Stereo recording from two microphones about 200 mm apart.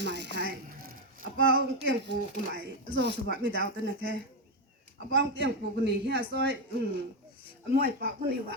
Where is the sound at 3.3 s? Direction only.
45° left (ahead or behind).